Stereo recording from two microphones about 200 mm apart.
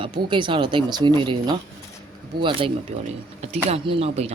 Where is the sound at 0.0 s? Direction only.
25° right (ahead or behind).